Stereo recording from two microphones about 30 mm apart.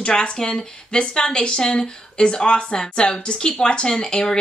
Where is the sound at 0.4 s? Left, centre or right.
Left.